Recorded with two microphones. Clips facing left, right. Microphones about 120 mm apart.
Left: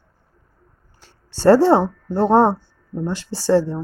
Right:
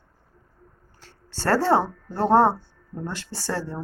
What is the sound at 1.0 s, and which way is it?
Speech, 15° left (ahead or behind).